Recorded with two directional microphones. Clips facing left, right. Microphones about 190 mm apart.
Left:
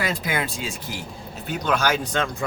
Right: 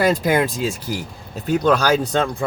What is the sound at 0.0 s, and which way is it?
Speech, 40° right (ahead or behind).